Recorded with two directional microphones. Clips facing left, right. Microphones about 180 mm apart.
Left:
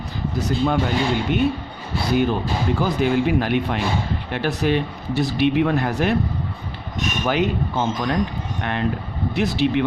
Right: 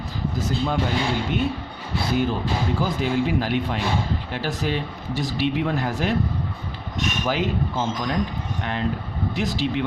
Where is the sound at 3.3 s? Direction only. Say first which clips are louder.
Left 3 dB; 60° left (ahead or behind).